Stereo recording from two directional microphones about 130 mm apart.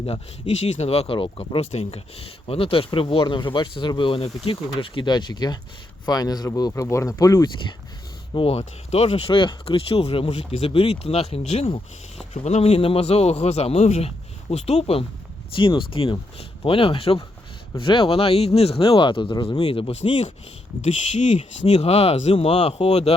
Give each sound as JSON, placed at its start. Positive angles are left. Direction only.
{"t": 0.0, "sound": "speech", "side_deg": 55}
{"t": 8.3, "sound": "speech", "side_deg": 45}
{"t": 15.5, "sound": "speech", "side_deg": 40}
{"t": 20.8, "sound": "speech", "side_deg": 65}